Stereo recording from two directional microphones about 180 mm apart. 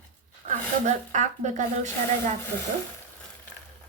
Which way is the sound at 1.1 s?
40° right (ahead or behind).